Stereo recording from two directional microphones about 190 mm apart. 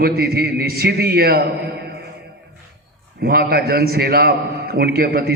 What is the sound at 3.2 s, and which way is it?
A man's voice, 55° right (ahead or behind).